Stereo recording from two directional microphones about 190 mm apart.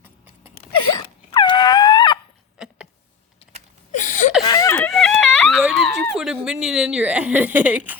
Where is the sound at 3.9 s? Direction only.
40° left (ahead or behind).